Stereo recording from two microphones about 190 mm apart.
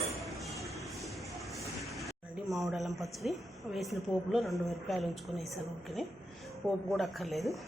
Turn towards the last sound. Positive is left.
turn(degrees=0)  # may be behind; listen again after turning